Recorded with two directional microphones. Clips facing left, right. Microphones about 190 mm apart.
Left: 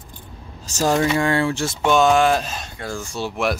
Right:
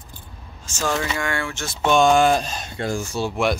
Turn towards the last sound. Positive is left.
turn(degrees=0)  # may be behind; listen again after turning